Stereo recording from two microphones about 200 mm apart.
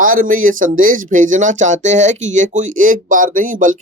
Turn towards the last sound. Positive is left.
turn(degrees=-40)  # may be behind; listen again after turning